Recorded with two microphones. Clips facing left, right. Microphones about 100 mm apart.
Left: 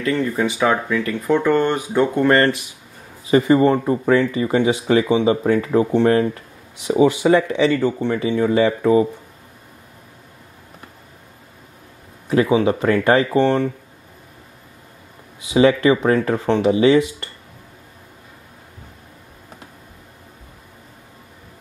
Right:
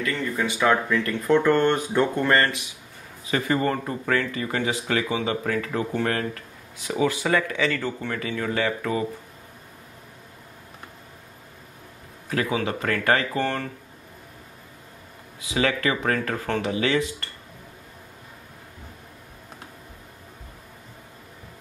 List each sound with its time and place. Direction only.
0.0 s speech: 15° left (ahead or behind)
2.2 s speech: 25° left (ahead or behind)
12.3 s speech: 25° left (ahead or behind)
15.4 s speech: 20° left (ahead or behind)